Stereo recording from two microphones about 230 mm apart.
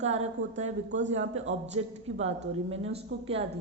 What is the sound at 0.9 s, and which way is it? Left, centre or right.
Speech, right.